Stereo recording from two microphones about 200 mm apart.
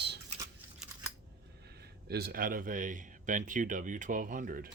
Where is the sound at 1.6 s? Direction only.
55° right (ahead or behind).